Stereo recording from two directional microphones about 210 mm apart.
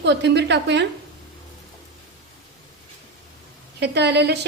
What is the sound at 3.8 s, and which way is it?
Speech, 55° right (ahead or behind).